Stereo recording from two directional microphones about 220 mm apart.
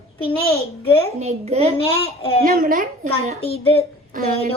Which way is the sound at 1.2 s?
30° right (ahead or behind).